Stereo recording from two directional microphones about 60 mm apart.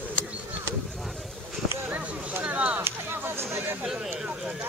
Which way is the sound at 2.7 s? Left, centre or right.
Right.